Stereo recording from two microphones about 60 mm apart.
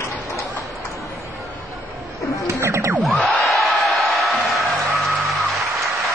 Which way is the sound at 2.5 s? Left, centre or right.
Right.